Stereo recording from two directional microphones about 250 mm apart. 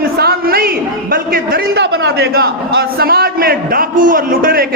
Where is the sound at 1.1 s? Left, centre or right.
Right.